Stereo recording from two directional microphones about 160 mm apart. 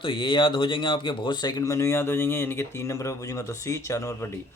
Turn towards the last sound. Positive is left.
turn(degrees=15)  # may be behind; listen again after turning